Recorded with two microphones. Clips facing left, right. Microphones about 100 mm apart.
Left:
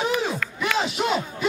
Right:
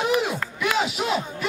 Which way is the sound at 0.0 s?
5° right (ahead or behind).